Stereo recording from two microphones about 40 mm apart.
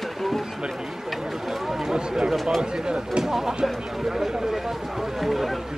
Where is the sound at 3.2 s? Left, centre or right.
Centre.